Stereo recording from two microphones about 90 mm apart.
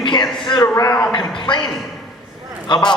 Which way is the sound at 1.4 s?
60° left (ahead or behind).